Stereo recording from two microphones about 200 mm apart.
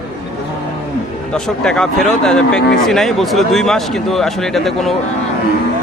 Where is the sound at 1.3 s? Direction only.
5° left (ahead or behind).